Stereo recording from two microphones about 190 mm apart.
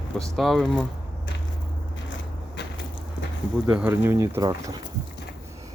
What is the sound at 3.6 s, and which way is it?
Speech, 10° right (ahead or behind).